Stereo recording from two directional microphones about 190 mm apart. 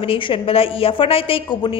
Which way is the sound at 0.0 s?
30° left (ahead or behind).